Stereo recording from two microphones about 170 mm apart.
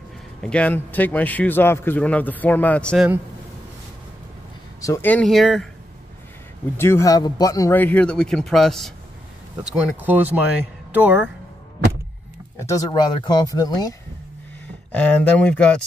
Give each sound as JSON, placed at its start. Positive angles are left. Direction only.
{"t": 0.4, "sound": "a man's voice", "side_deg": 5}
{"t": 4.8, "sound": "speech", "side_deg": 15}
{"t": 6.8, "sound": "a man's voice", "side_deg": 15}
{"t": 9.6, "sound": "speech", "side_deg": -10}
{"t": 12.5, "sound": "speech", "side_deg": 20}
{"t": 14.9, "sound": "a man's voice", "side_deg": 10}